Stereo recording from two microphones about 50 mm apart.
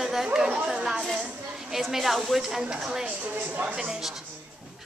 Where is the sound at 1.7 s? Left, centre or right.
Centre.